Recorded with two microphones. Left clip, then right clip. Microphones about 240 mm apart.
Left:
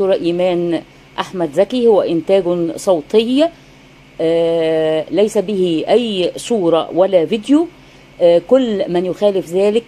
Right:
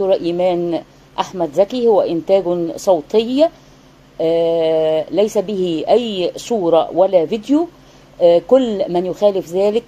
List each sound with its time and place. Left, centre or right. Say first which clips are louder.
0.0 s a woman's voice: left 1 dB; left